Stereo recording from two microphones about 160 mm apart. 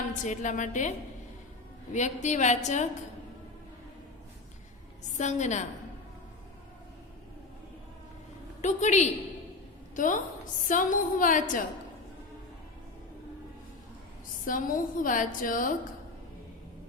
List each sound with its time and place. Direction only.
0.2 s a woman's voice: 50° left (ahead or behind)
5.1 s a woman's voice: 50° left (ahead or behind)
8.6 s a woman's voice: 45° left (ahead or behind)
14.4 s a woman's voice: 60° left (ahead or behind)